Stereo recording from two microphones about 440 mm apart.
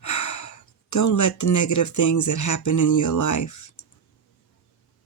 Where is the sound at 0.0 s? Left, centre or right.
Left.